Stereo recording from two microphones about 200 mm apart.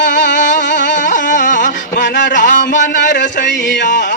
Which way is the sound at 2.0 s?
60° left (ahead or behind).